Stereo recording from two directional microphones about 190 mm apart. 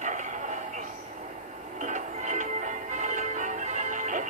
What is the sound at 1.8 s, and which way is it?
Music, 40° right (ahead or behind).